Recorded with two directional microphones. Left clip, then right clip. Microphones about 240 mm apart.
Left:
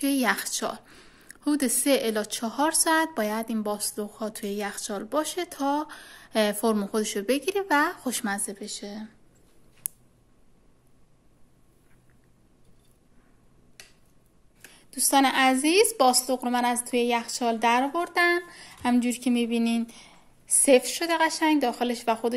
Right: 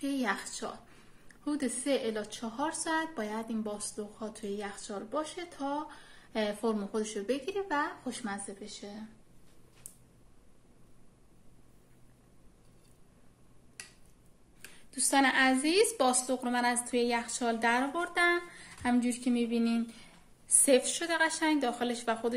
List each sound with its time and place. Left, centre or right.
0.0 s a woman's voice: left
14.9 s a woman's voice: left